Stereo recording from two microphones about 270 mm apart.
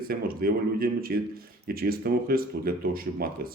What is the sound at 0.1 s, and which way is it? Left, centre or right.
A man's voice, right.